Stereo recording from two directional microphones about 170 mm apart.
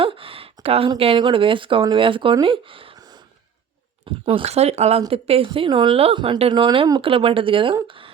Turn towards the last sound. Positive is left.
turn(degrees=-30)  # may be behind; listen again after turning